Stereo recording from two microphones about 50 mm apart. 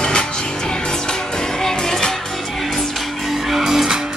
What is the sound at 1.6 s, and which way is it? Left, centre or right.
Music, centre.